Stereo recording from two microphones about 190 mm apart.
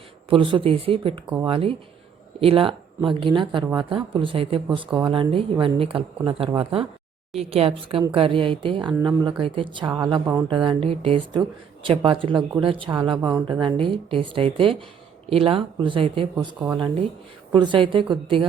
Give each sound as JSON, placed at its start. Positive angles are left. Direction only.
{"t": 0.3, "sound": "speech", "side_deg": -25}
{"t": 17.5, "sound": "speech", "side_deg": -25}